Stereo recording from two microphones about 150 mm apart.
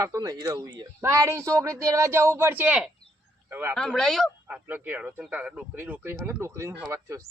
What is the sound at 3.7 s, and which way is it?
Speech, 5° left (ahead or behind).